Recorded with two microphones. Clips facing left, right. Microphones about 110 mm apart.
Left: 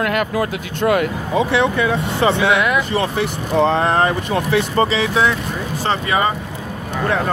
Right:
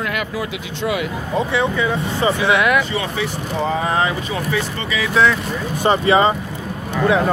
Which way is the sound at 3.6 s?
75° left (ahead or behind).